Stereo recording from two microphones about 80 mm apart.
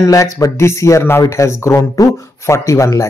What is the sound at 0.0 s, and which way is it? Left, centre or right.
Speech, left.